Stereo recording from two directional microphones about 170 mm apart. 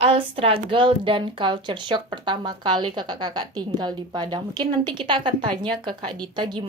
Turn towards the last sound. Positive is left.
turn(degrees=-25)  # may be behind; listen again after turning